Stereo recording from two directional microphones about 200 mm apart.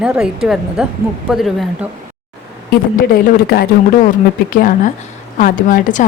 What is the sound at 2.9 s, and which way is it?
A woman's voice, 50° left (ahead or behind).